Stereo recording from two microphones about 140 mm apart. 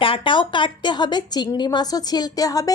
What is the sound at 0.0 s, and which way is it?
A woman's voice, 35° left (ahead or behind).